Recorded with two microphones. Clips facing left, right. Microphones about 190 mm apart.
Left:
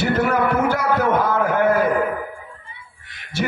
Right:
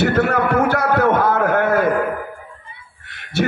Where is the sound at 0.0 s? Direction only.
65° right (ahead or behind).